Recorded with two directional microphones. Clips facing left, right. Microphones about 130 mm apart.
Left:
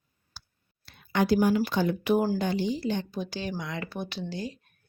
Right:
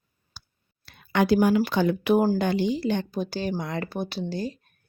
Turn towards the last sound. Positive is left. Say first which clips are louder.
# right 5 dB
turn(degrees=-35)  # may be behind; listen again after turning